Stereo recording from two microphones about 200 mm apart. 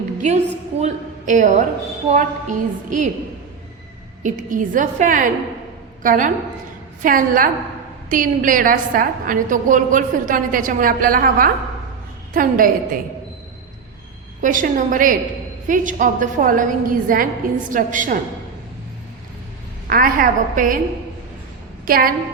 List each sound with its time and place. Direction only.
0.8 s a woman's voice: 40° right (ahead or behind)
4.2 s a woman's voice: 40° right (ahead or behind)
14.4 s a woman's voice: 40° right (ahead or behind)
19.9 s a woman's voice: 45° right (ahead or behind)
21.8 s a woman's voice: 45° right (ahead or behind)